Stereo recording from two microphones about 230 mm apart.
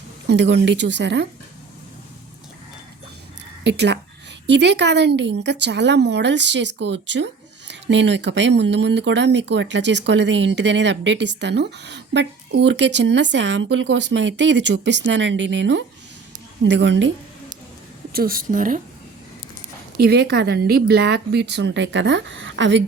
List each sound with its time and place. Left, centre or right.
0.3 s speech: right
3.6 s speech: right
18.1 s a woman's voice: right
20.1 s speech: right